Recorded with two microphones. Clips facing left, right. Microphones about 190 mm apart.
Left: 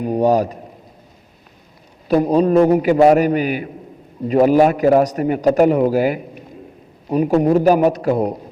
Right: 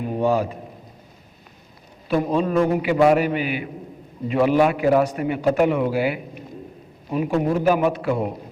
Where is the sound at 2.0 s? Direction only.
40° left (ahead or behind).